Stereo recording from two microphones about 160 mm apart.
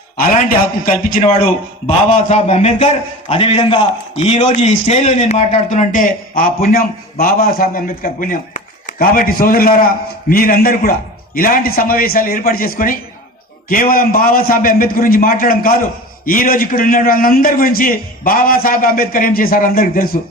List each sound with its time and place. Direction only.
0.2 s a man's voice: 60° left (ahead or behind)
2.0 s a man's voice: 45° left (ahead or behind); by 20.1 s 65° left (ahead or behind)